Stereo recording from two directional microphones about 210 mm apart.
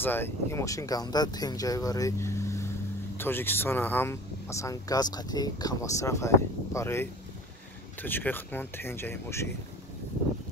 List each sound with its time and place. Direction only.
0.0 s speech: 10° left (ahead or behind)